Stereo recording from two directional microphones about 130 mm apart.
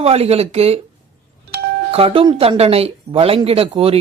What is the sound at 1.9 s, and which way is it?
Speech, 45° right (ahead or behind).